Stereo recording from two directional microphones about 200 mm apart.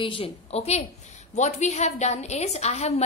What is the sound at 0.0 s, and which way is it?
A woman's voice, 25° left (ahead or behind).